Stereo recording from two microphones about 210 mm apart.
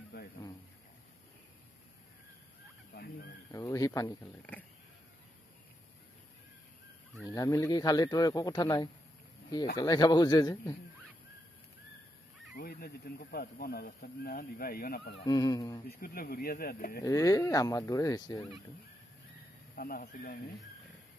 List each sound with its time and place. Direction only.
2.9 s fowl: 50° left (ahead or behind)
3.5 s speech: 15° left (ahead or behind)
7.2 s a man's voice: 15° left (ahead or behind)
12.5 s speech: 45° left (ahead or behind)
15.2 s a man's voice: 20° left (ahead or behind)
15.9 s speech: 45° left (ahead or behind)
17.0 s speech: 15° left (ahead or behind)
19.7 s a man's voice: 45° left (ahead or behind)